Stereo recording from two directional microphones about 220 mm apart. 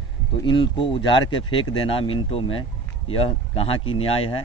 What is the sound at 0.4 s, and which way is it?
Speech, 20° left (ahead or behind).